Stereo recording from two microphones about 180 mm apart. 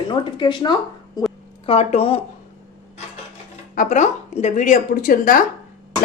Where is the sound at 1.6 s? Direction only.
35° left (ahead or behind).